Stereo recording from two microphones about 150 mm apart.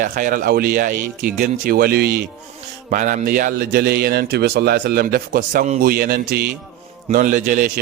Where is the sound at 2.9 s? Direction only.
65° right (ahead or behind); by 6.4 s 90° right.